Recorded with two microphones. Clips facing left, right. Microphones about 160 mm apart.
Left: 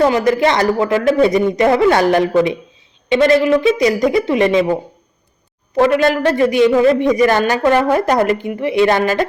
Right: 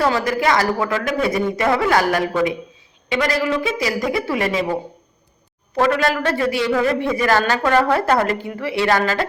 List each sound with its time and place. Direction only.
0.0 s speech: 20° left (ahead or behind)
5.7 s speech: 20° left (ahead or behind)